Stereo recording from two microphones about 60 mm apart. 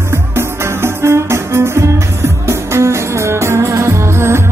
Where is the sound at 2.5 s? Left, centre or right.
Right.